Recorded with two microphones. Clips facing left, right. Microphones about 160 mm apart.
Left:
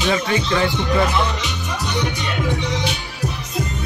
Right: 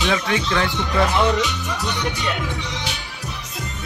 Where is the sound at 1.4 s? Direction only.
20° left (ahead or behind).